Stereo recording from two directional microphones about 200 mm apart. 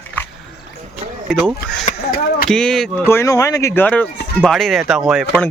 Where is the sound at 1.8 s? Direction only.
45° left (ahead or behind).